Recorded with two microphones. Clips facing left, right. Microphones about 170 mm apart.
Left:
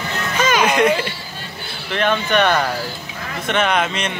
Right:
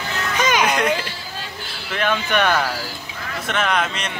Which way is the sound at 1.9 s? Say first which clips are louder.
Left 3 dB; 10° right (ahead or behind).